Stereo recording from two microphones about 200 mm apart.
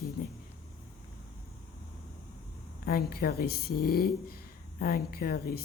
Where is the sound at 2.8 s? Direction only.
50° left (ahead or behind).